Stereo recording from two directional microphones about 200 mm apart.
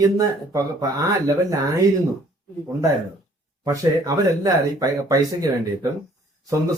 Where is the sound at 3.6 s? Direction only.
15° right (ahead or behind).